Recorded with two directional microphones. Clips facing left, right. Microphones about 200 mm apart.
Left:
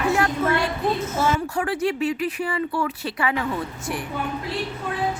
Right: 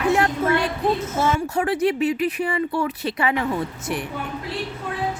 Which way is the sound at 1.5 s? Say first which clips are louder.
Right 3 dB; 20° right (ahead or behind).